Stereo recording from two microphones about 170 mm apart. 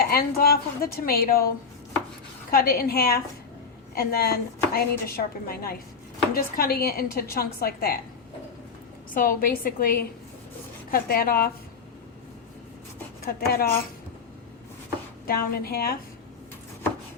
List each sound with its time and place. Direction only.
0.0 s speech: 60° left (ahead or behind)
2.5 s speech: 60° left (ahead or behind)
9.1 s speech: 55° left (ahead or behind)
13.2 s speech: 65° left (ahead or behind)
15.3 s speech: 65° left (ahead or behind)